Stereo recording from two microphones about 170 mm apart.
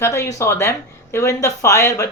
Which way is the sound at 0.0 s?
15° left (ahead or behind).